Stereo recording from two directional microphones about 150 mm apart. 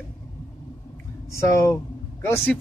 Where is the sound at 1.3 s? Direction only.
20° left (ahead or behind).